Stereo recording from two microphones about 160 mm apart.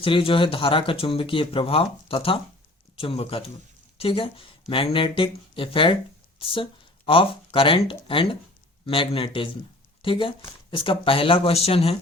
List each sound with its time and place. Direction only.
0.0 s a woman's voice: 35° left (ahead or behind)